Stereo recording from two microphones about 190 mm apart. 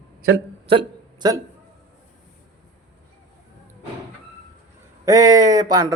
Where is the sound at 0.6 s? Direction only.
25° right (ahead or behind).